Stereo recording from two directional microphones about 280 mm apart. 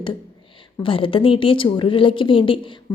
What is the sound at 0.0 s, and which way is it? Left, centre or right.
A woman's voice, centre.